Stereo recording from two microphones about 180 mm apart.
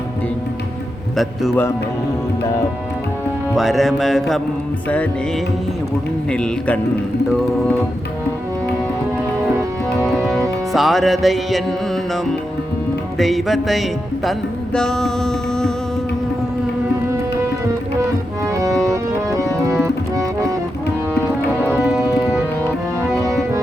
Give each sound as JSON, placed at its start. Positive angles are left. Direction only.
{"t": 1.1, "sound": "music", "side_deg": 0}
{"t": 3.5, "sound": "music", "side_deg": 0}
{"t": 6.3, "sound": "music", "side_deg": 5}
{"t": 10.1, "sound": "music", "side_deg": 0}
{"t": 13.1, "sound": "music", "side_deg": 0}
{"t": 18.4, "sound": "music", "side_deg": -15}
{"t": 22.0, "sound": "music", "side_deg": 15}